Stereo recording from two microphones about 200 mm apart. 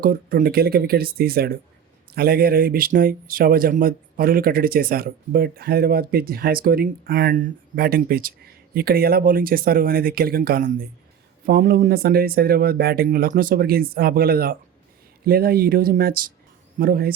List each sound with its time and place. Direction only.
0.0 s speech: 45° right (ahead or behind)